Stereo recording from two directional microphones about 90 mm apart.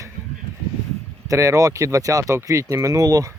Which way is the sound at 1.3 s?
40° right (ahead or behind).